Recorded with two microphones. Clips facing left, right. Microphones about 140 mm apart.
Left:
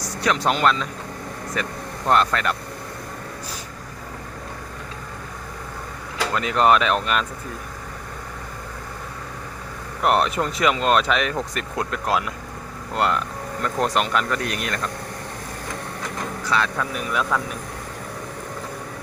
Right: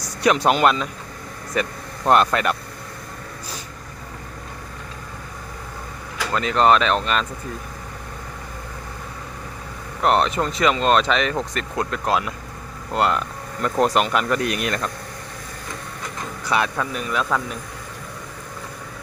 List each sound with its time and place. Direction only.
0.2 s speech: 15° right (ahead or behind)
6.3 s speech: 10° left (ahead or behind)
10.0 s speech: 10° left (ahead or behind)
14.4 s speech: 20° right (ahead or behind)
16.5 s speech: 15° right (ahead or behind)
17.0 s speech: 5° left (ahead or behind)